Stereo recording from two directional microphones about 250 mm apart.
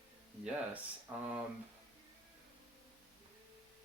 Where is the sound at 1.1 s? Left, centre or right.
Centre.